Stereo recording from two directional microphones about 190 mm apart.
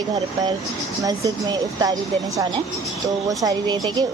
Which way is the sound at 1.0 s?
20° right (ahead or behind).